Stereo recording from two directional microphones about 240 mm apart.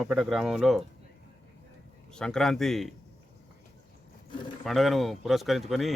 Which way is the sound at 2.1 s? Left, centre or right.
Centre.